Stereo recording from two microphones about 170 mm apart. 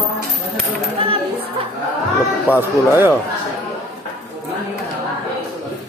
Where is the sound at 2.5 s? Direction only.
10° right (ahead or behind).